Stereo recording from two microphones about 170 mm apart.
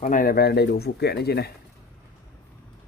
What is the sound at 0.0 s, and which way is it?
Speech, 55° left (ahead or behind).